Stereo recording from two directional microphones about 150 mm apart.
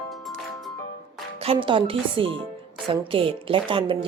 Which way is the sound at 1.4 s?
35° right (ahead or behind).